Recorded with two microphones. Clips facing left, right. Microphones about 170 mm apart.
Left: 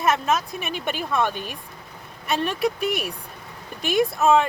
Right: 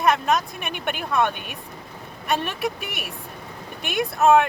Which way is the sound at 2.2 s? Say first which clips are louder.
Left 2 dB; centre (ahead or behind).